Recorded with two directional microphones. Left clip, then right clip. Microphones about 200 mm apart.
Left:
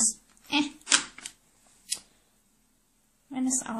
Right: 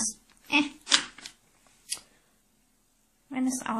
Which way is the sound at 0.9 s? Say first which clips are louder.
Right 1 dB; 20° left (ahead or behind).